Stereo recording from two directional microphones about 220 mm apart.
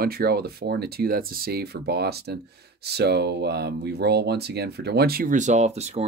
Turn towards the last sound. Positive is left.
turn(degrees=-30)  # may be behind; listen again after turning